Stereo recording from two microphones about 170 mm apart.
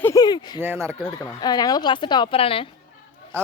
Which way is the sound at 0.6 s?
15° right (ahead or behind).